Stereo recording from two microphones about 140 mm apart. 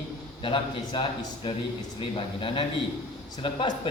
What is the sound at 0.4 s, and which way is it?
A man's voice, 40° left (ahead or behind).